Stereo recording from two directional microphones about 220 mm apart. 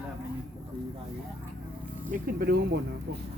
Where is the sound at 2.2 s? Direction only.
45° right (ahead or behind).